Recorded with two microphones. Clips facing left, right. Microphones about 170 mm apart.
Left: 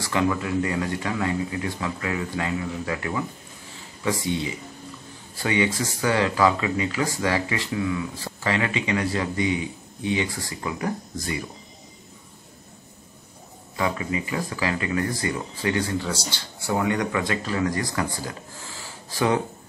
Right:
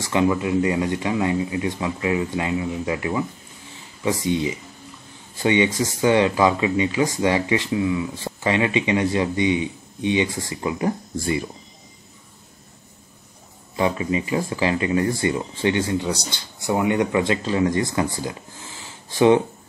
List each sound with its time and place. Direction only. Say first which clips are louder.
0.0 s speech: right 4 dB; 20° right (ahead or behind)
13.7 s speech: right 4 dB; 25° right (ahead or behind)